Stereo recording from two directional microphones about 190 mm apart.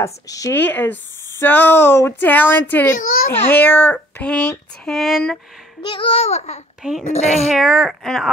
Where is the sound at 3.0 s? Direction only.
45° left (ahead or behind).